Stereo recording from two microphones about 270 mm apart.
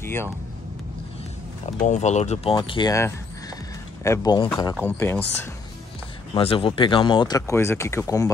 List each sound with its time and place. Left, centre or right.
0.0 s speech: centre
1.9 s speech: left; by 5.5 s centre
6.3 s speech: centre